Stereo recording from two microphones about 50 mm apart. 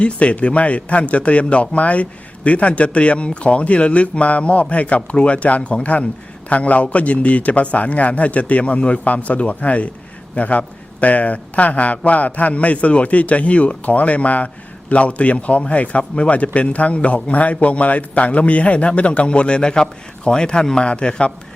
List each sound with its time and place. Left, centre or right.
0.0 s a man's voice: left